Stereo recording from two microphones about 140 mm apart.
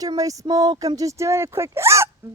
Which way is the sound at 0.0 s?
25° right (ahead or behind).